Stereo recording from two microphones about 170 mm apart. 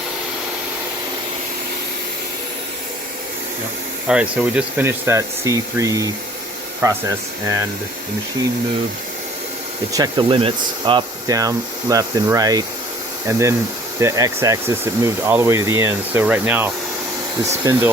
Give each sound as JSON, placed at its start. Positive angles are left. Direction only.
{"t": 4.1, "sound": "speech", "side_deg": -5}
{"t": 9.9, "sound": "speech", "side_deg": -25}